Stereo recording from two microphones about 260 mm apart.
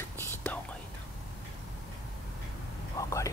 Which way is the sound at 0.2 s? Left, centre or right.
Centre.